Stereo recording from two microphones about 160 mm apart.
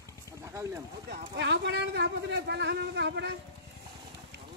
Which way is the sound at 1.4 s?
90° right.